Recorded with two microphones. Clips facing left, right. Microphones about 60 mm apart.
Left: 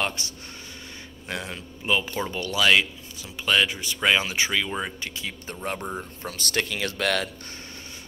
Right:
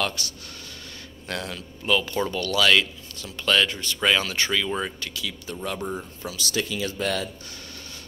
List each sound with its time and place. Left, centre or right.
0.0 s speech: left
5.0 s speech: left
5.8 s speech: centre
6.2 s speech: left